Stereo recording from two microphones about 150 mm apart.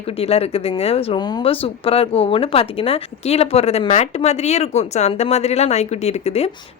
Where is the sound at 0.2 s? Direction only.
40° left (ahead or behind).